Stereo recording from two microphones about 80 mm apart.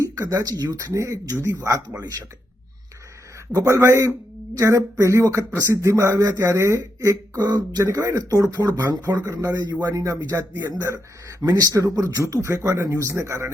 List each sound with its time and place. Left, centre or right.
0.0 s speech: right
3.5 s speech: right
7.4 s speech: right
9.9 s speech: right
10.5 s speech: right
10.8 s speech: right